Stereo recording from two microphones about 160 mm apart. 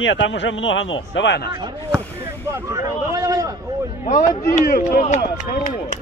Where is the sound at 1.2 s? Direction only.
90° left.